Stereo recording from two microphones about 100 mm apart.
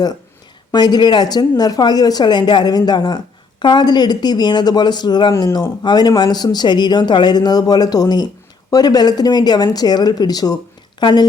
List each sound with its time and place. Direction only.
0.7 s a woman's voice: 45° left (ahead or behind)